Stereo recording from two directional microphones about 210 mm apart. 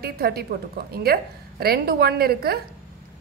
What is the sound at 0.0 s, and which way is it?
A woman's voice, 45° right (ahead or behind).